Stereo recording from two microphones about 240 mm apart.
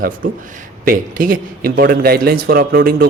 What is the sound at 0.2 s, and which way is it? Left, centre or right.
Speech, right.